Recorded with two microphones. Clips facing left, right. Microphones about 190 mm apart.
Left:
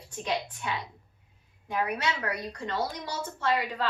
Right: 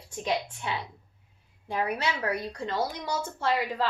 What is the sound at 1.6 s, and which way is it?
A woman's voice, 30° right (ahead or behind).